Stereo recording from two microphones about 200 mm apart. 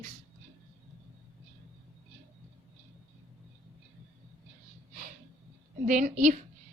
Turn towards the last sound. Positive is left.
turn(degrees=-40)  # may be behind; listen again after turning